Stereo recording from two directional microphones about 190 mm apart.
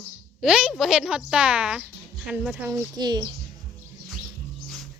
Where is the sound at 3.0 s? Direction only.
20° right (ahead or behind).